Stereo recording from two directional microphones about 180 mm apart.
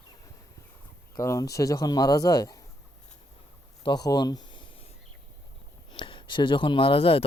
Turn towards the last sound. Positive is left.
turn(degrees=30)  # may be behind; listen again after turning